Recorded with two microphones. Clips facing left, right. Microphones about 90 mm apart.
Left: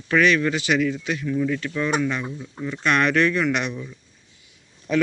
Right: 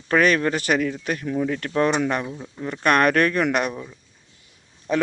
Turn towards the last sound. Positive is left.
turn(degrees=-35)  # may be behind; listen again after turning